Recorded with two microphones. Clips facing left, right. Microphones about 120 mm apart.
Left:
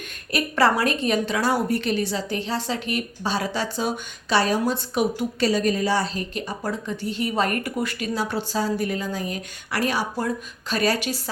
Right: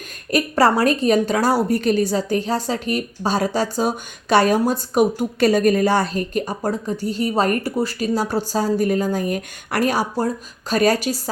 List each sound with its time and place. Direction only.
0.3 s a woman's voice: 40° right (ahead or behind)